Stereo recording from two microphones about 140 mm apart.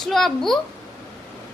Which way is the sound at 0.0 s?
Centre (ahead or behind).